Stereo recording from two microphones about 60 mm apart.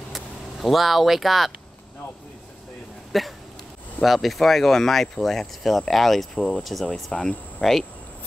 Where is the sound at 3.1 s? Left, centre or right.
Centre.